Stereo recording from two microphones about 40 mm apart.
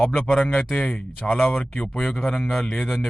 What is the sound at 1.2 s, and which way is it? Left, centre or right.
A man's voice, centre.